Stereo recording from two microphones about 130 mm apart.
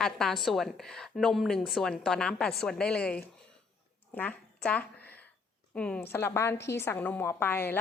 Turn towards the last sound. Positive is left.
turn(degrees=15)  # may be behind; listen again after turning